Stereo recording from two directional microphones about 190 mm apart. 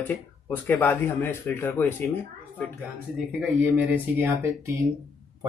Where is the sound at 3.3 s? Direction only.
10° right (ahead or behind).